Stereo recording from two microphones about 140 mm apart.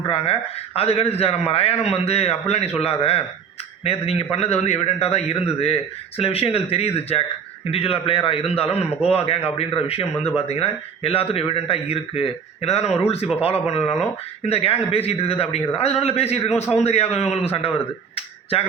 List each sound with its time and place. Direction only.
0.1 s a man's voice: 45° left (ahead or behind)
18.1 s finger snapping: 45° left (ahead or behind)